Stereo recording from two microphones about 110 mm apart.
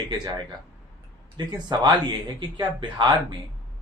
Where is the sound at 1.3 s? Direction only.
40° right (ahead or behind).